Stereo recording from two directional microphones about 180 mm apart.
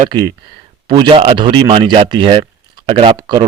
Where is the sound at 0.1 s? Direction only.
25° right (ahead or behind).